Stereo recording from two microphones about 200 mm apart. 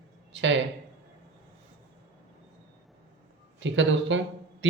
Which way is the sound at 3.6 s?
65° right (ahead or behind).